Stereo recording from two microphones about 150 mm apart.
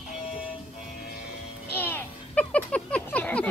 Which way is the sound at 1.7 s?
15° left (ahead or behind).